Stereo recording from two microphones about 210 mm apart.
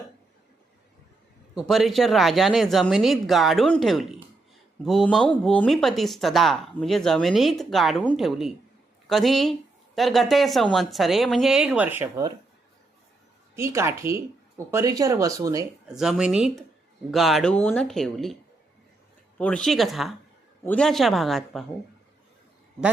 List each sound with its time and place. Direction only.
1.5 s speech: centre (ahead or behind)
13.6 s speech: 15° right (ahead or behind)
15.9 s speech: 5° right (ahead or behind)
19.4 s speech: 5° left (ahead or behind)